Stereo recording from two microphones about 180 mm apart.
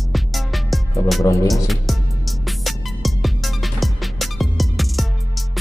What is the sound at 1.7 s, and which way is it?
Music, centre (ahead or behind).